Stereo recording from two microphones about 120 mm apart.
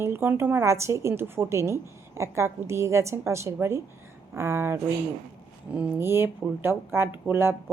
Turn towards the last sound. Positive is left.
turn(degrees=-20)  # may be behind; listen again after turning